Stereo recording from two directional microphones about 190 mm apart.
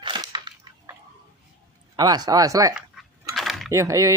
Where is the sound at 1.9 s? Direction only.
20° right (ahead or behind).